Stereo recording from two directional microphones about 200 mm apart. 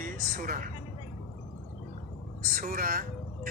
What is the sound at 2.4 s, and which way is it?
Speech, 45° right (ahead or behind).